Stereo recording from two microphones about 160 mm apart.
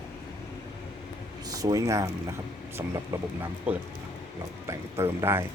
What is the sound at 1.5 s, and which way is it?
Speech, 20° right (ahead or behind).